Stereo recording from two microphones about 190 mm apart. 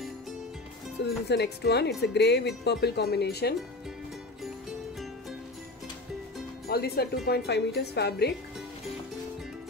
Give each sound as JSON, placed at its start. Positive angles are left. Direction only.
{"t": 1.0, "sound": "music", "side_deg": 65}
{"t": 1.3, "sound": "speech", "side_deg": 60}
{"t": 6.7, "sound": "speech", "side_deg": 55}